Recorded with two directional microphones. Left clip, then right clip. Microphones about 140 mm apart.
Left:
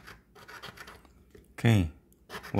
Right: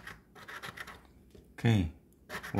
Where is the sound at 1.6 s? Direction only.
45° left (ahead or behind).